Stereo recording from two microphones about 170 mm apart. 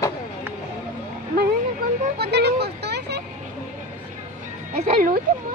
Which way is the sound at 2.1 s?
75° right (ahead or behind).